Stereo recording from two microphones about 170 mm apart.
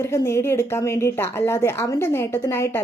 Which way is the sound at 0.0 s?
15° left (ahead or behind).